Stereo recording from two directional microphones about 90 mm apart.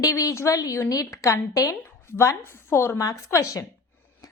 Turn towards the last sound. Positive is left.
turn(degrees=35)  # may be behind; listen again after turning